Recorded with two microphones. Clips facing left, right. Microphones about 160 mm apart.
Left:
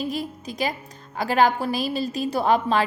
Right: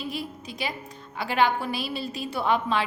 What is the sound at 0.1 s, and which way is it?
A woman's voice, 40° left (ahead or behind).